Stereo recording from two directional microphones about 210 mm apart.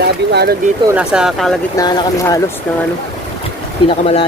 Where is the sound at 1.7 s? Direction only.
20° left (ahead or behind).